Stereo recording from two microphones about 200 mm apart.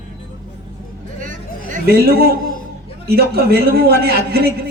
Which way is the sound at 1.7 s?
50° right (ahead or behind).